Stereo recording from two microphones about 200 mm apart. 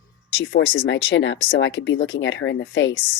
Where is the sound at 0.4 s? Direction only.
65° left (ahead or behind).